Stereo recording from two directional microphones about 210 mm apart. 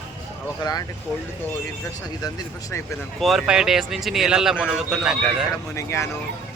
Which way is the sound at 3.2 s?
Centre (ahead or behind).